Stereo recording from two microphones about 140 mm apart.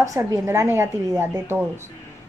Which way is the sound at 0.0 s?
25° right (ahead or behind).